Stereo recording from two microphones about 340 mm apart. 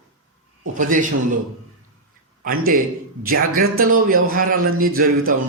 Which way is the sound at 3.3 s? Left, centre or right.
Right.